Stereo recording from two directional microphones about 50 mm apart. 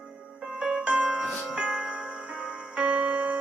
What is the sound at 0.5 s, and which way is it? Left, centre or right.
Music, centre.